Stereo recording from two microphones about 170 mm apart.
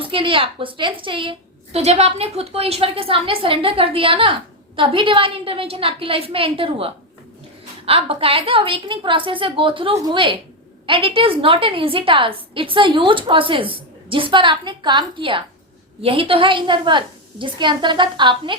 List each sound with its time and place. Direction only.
0.0 s a woman's voice: 30° right (ahead or behind)